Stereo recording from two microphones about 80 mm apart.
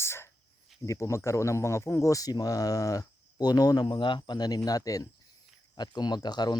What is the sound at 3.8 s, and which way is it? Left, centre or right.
Speech, left.